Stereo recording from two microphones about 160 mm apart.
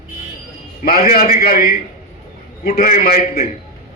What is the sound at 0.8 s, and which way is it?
Speech, 65° left (ahead or behind).